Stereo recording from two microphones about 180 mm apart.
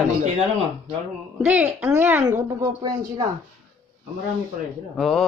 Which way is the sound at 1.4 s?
10° right (ahead or behind).